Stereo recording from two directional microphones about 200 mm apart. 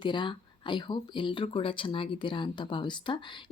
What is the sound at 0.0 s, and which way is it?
Speech, 25° left (ahead or behind).